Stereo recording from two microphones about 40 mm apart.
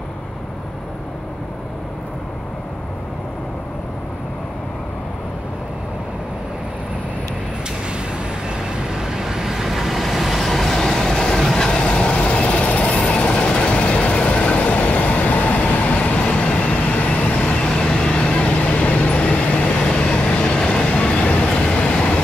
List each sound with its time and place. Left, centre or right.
8.5 s vehicle: centre; by 13.0 s left
13.0 s train: left
16.2 s vehicle: left
18.4 s vehicle: left